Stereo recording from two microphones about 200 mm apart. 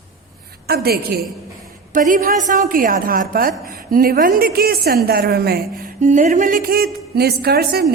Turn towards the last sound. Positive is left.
turn(degrees=-50)  # may be behind; listen again after turning